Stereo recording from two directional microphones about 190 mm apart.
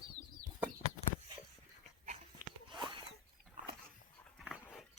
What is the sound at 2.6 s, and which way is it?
Zipper, 25° right (ahead or behind).